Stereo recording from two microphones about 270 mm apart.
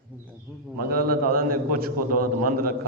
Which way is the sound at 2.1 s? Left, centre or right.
Right.